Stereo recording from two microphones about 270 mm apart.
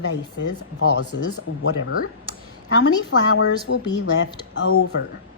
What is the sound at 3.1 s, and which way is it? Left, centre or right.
Speech, left.